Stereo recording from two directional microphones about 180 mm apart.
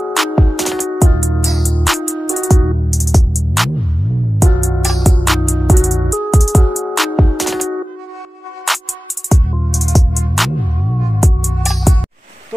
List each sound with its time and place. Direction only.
0.1 s music: centre (ahead or behind)